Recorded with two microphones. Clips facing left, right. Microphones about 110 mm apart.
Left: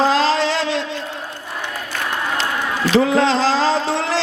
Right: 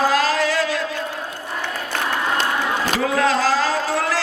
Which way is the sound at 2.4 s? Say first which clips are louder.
Even; 50° right (ahead or behind).